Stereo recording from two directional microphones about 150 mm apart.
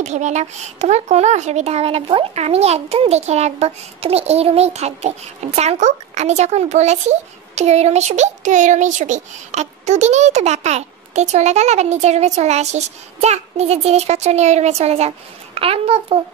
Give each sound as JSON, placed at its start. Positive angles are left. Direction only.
{"t": 0.0, "sound": "speech", "side_deg": -50}